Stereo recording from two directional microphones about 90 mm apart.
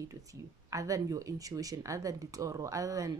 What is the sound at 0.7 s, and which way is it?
Speech, 40° right (ahead or behind).